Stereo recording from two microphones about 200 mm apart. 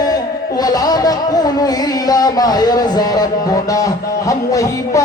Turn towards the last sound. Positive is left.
turn(degrees=15)  # may be behind; listen again after turning